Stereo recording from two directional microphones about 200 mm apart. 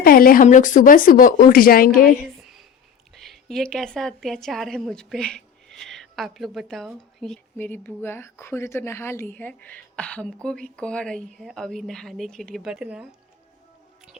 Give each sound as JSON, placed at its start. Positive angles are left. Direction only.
{"t": 0.0, "sound": "speech", "side_deg": 45}
{"t": 3.2, "sound": "a woman's voice", "side_deg": 0}